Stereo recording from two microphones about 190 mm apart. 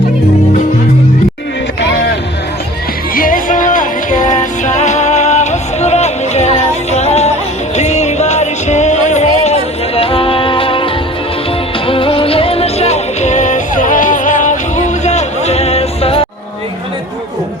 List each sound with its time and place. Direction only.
3.2 s music: 45° left (ahead or behind); by 10.8 s 25° left (ahead or behind)
11.9 s music: 30° left (ahead or behind)